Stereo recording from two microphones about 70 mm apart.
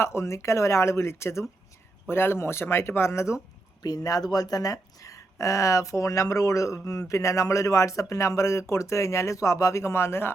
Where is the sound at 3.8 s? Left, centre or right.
Left.